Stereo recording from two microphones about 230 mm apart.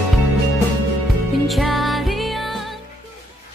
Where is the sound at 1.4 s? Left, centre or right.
Centre.